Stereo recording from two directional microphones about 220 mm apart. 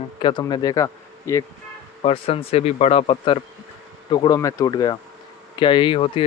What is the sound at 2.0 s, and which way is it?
Speech, 25° left (ahead or behind).